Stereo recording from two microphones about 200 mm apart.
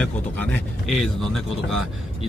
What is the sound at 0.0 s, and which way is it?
A man's voice, 5° left (ahead or behind).